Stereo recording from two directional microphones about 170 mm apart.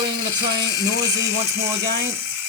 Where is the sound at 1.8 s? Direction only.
70° right (ahead or behind).